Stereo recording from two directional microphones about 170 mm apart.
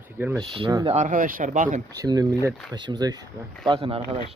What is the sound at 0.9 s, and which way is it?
Speech, 45° right (ahead or behind).